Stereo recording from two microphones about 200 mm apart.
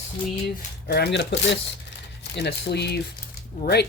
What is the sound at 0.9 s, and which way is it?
Speech, 55° left (ahead or behind).